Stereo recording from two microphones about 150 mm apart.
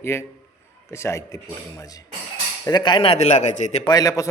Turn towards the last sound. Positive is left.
turn(degrees=20)  # may be behind; listen again after turning